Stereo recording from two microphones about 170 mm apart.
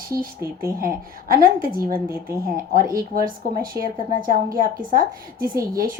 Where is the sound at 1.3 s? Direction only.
60° right (ahead or behind).